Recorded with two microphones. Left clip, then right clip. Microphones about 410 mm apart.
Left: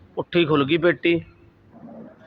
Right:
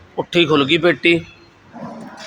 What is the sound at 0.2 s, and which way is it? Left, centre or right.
A man's voice, left.